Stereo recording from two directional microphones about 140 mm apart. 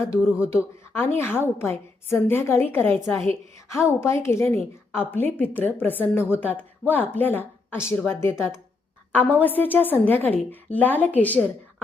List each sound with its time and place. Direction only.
0.4 s a woman's voice: 20° left (ahead or behind)